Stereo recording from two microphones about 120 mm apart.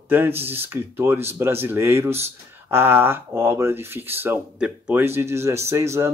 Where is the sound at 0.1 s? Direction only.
20° right (ahead or behind).